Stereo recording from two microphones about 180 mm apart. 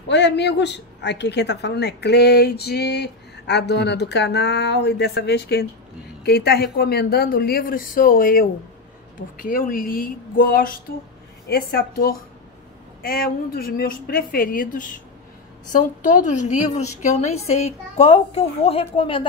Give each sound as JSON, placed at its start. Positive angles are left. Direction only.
{"t": 0.1, "sound": "a woman's voice", "side_deg": 75}